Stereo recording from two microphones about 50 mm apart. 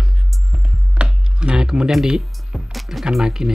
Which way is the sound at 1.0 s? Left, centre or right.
Centre.